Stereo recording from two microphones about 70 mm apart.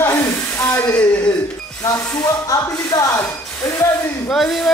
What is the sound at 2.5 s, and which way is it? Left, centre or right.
Speech, left.